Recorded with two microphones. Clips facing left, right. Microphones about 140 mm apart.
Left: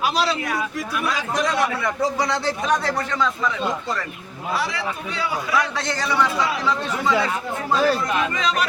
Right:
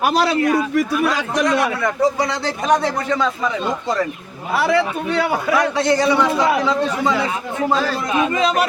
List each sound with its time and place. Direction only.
0.0 s a man's voice: 55° right (ahead or behind)
1.1 s a man's voice: 75° right (ahead or behind)
4.5 s a man's voice: 60° right (ahead or behind)
5.7 s a man's voice: 15° right (ahead or behind)